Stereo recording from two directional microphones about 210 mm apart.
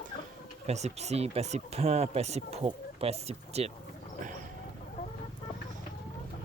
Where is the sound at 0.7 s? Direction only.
30° right (ahead or behind).